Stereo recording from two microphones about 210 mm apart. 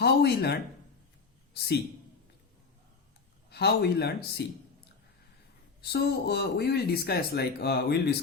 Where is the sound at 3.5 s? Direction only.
50° left (ahead or behind).